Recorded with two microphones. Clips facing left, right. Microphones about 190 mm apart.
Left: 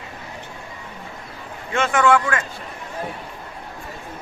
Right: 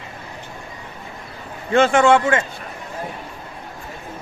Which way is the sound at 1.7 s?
30° right (ahead or behind).